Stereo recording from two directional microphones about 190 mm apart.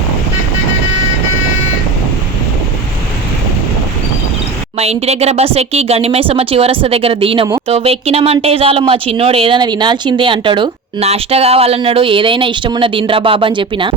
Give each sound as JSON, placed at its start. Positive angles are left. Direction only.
{"t": 4.8, "sound": "speech", "side_deg": -35}